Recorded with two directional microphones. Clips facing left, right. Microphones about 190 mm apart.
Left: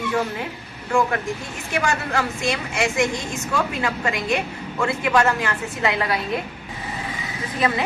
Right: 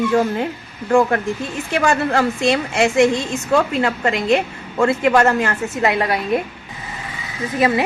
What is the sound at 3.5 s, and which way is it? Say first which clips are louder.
A woman's voice: right 7 dB; 50° right (ahead or behind).